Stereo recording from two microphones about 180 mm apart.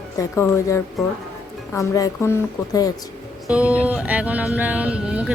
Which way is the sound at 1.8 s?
15° left (ahead or behind).